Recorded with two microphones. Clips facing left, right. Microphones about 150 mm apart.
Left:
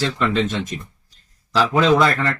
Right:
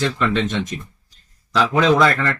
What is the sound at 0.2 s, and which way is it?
Speech, centre (ahead or behind).